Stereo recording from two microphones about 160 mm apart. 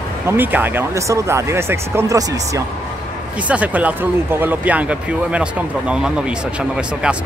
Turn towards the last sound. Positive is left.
turn(degrees=-5)  # may be behind; listen again after turning